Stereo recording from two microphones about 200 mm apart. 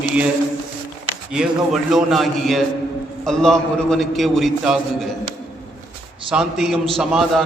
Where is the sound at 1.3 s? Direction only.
Centre (ahead or behind).